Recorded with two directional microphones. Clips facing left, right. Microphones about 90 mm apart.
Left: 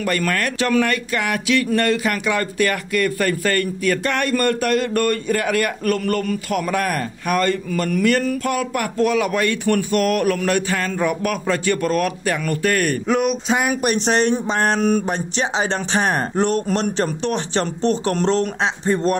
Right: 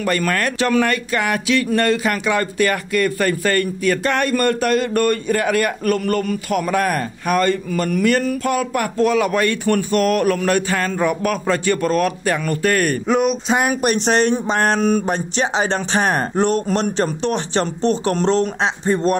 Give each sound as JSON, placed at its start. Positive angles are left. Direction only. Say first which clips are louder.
{"t": 0.0, "sound": "speech", "louder": "right 2 dB", "side_deg": -30}